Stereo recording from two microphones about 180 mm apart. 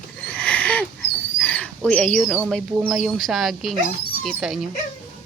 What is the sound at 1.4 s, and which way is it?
Dog, 10° left (ahead or behind).